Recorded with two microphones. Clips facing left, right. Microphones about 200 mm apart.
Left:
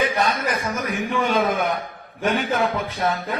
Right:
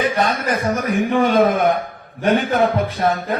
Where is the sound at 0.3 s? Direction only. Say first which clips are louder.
Right 4 dB; 45° right (ahead or behind).